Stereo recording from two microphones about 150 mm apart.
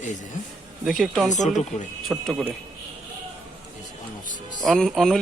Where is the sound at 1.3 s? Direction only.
55° left (ahead or behind).